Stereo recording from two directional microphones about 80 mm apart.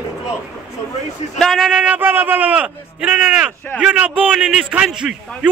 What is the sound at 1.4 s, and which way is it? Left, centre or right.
Speech, centre.